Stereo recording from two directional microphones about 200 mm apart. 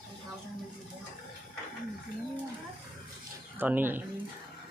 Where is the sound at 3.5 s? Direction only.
10° right (ahead or behind).